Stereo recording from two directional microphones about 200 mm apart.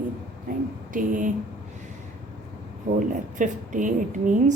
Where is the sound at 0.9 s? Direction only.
40° right (ahead or behind).